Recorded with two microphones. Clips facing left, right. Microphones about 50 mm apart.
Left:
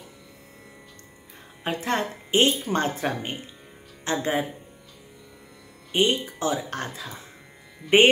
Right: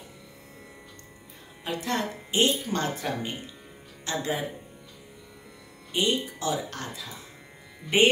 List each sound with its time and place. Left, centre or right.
1.6 s speech: left
5.9 s speech: left